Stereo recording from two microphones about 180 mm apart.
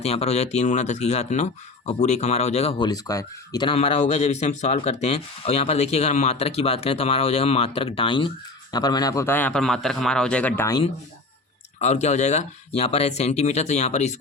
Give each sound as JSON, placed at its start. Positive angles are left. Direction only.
{"t": 0.0, "sound": "a man's voice", "side_deg": 35}
{"t": 11.8, "sound": "speech", "side_deg": 40}